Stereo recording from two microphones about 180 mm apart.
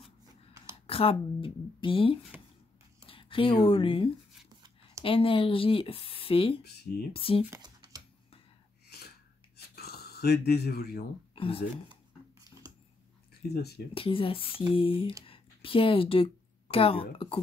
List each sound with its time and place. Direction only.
0.8 s speech: 30° left (ahead or behind)
9.8 s speech: 60° left (ahead or behind)
11.3 s speech: 30° left (ahead or behind)
13.5 s speech: 65° left (ahead or behind)
13.9 s speech: 30° left (ahead or behind)